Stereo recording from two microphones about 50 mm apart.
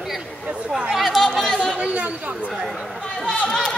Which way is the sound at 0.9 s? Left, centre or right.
Centre.